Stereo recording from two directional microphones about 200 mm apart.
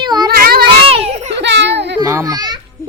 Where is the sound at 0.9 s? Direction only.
30° right (ahead or behind).